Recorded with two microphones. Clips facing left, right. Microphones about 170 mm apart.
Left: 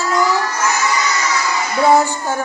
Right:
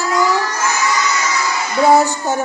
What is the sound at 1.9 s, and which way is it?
Child singing, 20° right (ahead or behind).